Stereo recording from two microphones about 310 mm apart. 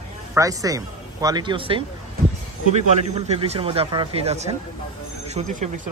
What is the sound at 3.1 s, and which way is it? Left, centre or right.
Speech, centre.